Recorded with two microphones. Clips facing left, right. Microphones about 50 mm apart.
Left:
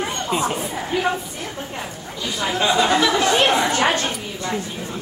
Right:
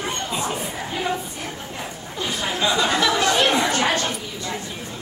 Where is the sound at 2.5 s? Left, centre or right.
Left.